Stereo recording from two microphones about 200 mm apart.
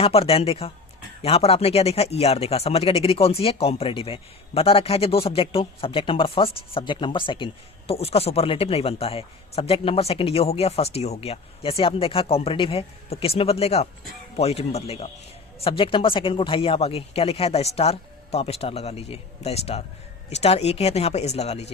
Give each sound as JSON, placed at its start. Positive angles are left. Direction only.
{"t": 0.0, "sound": "speech", "side_deg": 30}